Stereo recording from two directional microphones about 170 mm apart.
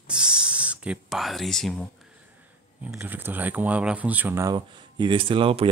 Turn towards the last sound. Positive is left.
turn(degrees=-30)  # may be behind; listen again after turning